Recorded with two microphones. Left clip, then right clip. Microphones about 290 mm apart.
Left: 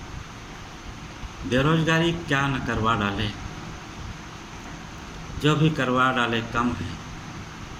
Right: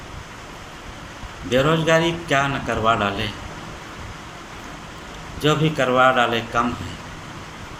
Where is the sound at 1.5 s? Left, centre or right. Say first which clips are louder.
Right 5 dB; centre.